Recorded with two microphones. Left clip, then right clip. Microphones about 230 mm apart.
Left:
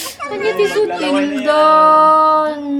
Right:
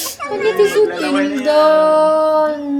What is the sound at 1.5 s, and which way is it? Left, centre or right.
Female singing, left.